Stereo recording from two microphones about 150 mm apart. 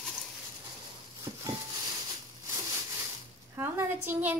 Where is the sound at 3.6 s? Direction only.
15° right (ahead or behind).